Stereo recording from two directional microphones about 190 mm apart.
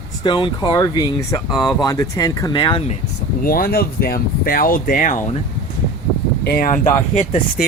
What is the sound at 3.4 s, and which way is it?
Speech, 50° left (ahead or behind).